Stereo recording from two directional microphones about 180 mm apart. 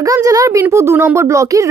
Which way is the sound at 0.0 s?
20° right (ahead or behind).